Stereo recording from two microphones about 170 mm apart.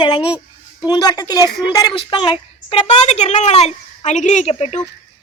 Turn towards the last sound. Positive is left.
turn(degrees=40)  # may be behind; listen again after turning